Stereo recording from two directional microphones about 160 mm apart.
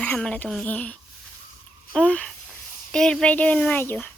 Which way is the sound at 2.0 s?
10° left (ahead or behind).